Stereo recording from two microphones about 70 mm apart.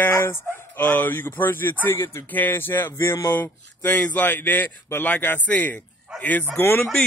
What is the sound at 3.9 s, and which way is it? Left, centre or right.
Speech, left.